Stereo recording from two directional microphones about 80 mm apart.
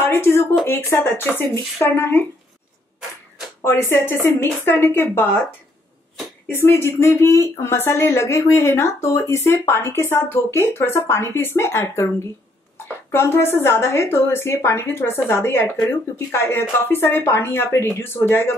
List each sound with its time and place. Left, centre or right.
0.0 s a woman's voice: left
3.6 s a woman's voice: left
6.6 s a woman's voice: left